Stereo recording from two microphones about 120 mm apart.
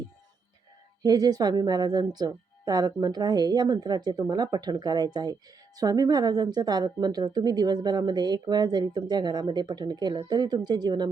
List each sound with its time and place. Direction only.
1.0 s a woman's voice: 35° right (ahead or behind)